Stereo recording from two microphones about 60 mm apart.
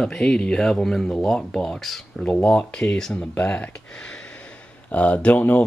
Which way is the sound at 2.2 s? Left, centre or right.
Centre.